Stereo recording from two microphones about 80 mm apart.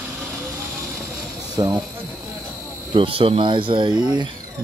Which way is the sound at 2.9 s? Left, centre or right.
Right.